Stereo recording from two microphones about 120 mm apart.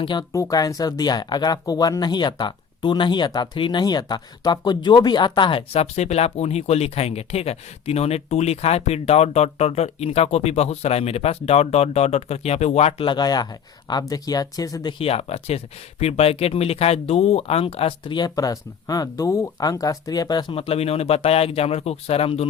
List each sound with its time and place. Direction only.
0.0 s speech: 40° left (ahead or behind); by 13.1 s 60° left (ahead or behind)
13.1 s speech: 35° left (ahead or behind)
14.9 s speech: 55° left (ahead or behind); by 20.6 s 35° left (ahead or behind)
20.6 s speech: 55° left (ahead or behind)